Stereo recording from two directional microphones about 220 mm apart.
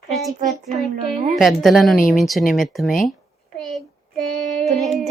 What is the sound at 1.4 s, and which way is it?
Speech, centre (ahead or behind).